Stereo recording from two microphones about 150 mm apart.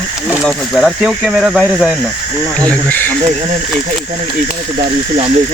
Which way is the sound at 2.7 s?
10° left (ahead or behind).